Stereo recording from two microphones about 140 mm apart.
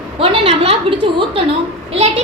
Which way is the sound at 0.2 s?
45° right (ahead or behind).